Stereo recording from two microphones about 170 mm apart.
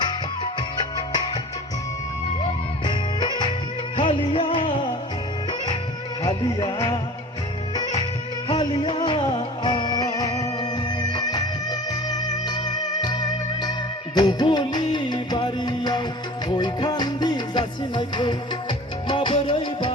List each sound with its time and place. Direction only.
0.0 s music: 25° left (ahead or behind)
2.4 s music: 25° left (ahead or behind)
6.5 s music: 20° left (ahead or behind)
8.4 s music: 25° left (ahead or behind)